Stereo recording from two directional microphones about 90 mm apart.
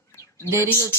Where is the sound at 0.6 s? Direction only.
30° left (ahead or behind).